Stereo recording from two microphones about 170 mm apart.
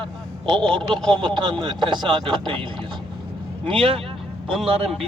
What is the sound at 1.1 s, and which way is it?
Speech, 30° right (ahead or behind).